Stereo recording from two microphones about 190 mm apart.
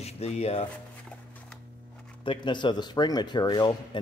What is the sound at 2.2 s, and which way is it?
Speech, 25° left (ahead or behind).